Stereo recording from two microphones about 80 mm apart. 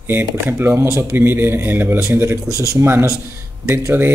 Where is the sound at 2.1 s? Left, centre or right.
Right.